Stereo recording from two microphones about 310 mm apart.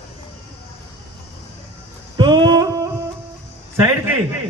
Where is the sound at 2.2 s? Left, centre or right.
Centre.